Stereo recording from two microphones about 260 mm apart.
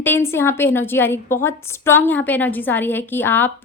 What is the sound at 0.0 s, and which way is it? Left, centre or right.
A woman's voice, centre.